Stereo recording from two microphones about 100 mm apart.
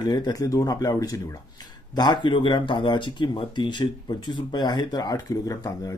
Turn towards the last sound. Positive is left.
turn(degrees=35)  # may be behind; listen again after turning